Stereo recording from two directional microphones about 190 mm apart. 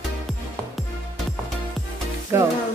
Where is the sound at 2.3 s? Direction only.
15° right (ahead or behind).